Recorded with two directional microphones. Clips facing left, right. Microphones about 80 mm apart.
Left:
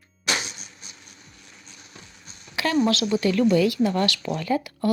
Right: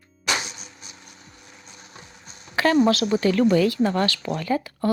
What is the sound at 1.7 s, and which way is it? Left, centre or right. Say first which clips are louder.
Music: right 2 dB; right.